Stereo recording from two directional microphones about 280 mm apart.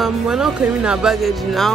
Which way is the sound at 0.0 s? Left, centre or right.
Centre.